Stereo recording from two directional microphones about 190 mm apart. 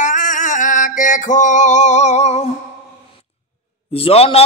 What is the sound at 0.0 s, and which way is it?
Male singing, 40° left (ahead or behind).